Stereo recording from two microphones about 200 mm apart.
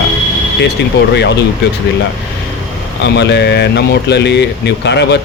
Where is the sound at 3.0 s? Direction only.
60° left (ahead or behind).